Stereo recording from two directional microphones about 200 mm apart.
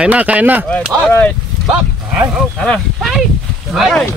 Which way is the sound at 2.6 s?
Centre (ahead or behind).